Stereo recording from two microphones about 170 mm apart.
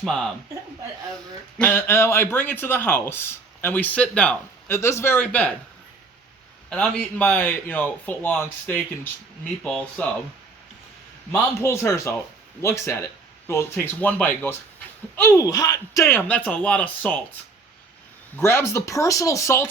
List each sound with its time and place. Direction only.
0.0 s speech: 5° left (ahead or behind)
1.5 s a man's voice: 10° left (ahead or behind)
6.7 s a man's voice: 5° left (ahead or behind)
11.3 s a man's voice: 15° left (ahead or behind)
18.3 s a man's voice: 15° left (ahead or behind)